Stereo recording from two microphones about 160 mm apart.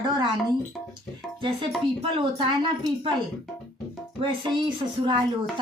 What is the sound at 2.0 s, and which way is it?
Speech, 35° right (ahead or behind).